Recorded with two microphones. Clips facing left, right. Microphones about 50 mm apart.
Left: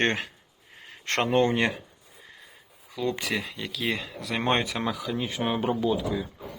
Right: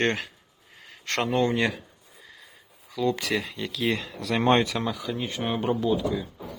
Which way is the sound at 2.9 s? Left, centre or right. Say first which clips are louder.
Right 3 dB; left.